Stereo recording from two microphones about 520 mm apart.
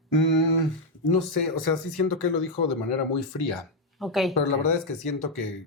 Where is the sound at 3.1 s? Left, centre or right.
Left.